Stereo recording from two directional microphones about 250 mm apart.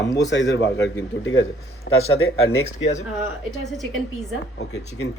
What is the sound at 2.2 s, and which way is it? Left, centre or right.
Speech, left.